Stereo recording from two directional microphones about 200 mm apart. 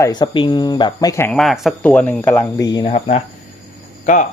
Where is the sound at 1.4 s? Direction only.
Centre (ahead or behind); by 3.0 s 20° left (ahead or behind).